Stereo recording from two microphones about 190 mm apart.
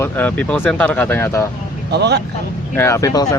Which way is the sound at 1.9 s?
60° right (ahead or behind).